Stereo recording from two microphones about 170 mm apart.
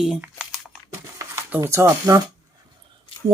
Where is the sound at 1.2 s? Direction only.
15° right (ahead or behind).